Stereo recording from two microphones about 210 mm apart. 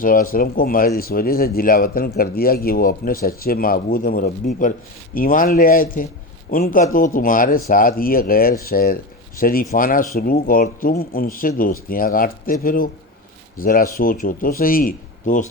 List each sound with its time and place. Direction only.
0.0 s speech: 40° left (ahead or behind)